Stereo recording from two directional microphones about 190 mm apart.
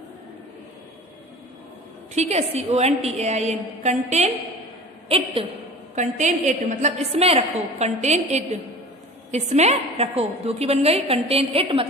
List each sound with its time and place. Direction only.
2.1 s a woman's voice: 35° right (ahead or behind)